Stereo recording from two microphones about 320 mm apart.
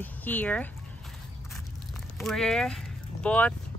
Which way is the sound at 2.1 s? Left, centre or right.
Centre.